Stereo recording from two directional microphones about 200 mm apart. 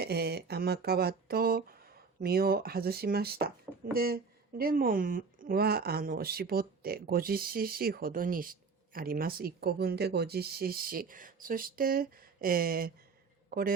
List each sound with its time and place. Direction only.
0.0 s a man's voice: 55° right (ahead or behind)